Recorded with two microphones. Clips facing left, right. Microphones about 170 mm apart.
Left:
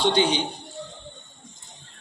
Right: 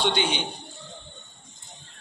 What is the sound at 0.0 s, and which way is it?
Speech, 40° left (ahead or behind).